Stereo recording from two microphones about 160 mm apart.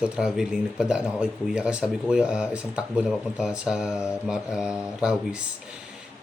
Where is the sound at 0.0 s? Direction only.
5° right (ahead or behind).